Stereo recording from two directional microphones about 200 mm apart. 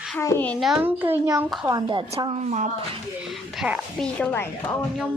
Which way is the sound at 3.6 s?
Centre (ahead or behind).